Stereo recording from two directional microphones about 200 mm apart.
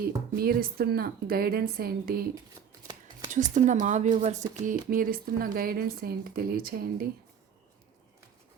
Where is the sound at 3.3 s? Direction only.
40° right (ahead or behind).